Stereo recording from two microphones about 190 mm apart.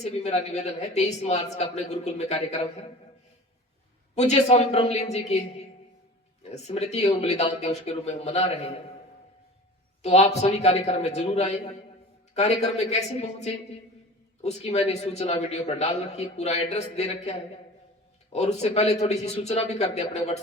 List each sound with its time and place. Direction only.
0.0 s a man's voice: 35° left (ahead or behind)
4.1 s a man's voice: 35° left (ahead or behind)
6.4 s a man's voice: 35° left (ahead or behind)
10.0 s a man's voice: 35° left (ahead or behind)